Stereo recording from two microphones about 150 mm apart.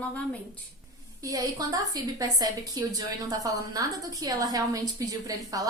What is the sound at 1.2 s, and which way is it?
A woman's voice, 25° right (ahead or behind).